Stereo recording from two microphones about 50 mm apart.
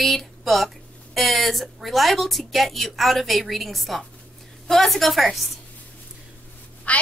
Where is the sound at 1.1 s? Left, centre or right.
Centre.